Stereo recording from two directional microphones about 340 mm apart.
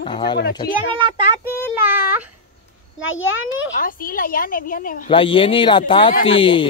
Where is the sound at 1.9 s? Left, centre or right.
Centre.